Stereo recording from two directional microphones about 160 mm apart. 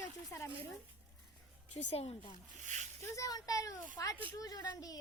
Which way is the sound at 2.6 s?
50° right (ahead or behind).